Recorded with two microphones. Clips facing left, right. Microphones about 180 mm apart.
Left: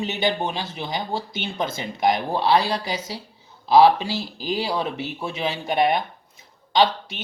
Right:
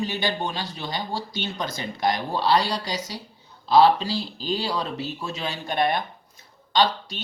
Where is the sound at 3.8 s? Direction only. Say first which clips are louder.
Left 2 dB; 10° left (ahead or behind).